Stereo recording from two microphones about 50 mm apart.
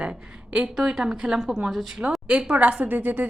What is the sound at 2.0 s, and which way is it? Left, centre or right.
A woman's voice, right.